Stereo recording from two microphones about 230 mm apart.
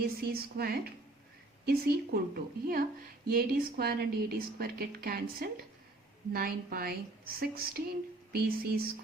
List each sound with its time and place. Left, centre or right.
0.3 s a woman's voice: right